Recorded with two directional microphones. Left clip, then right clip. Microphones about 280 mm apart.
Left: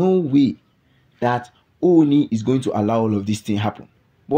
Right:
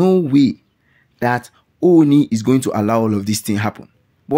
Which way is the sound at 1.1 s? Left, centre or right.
Right.